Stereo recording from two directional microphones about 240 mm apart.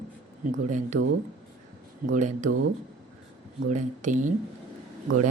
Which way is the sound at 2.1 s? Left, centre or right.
Right.